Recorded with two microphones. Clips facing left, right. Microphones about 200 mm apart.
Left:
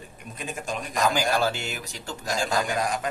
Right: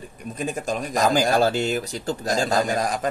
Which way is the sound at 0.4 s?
40° right (ahead or behind).